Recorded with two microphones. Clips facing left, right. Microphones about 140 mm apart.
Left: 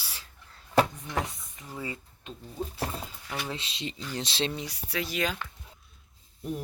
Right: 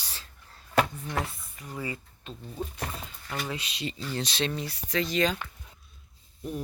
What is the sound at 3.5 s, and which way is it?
Speech, 25° left (ahead or behind).